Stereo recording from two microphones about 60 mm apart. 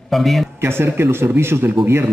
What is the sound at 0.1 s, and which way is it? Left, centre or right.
Speech, centre.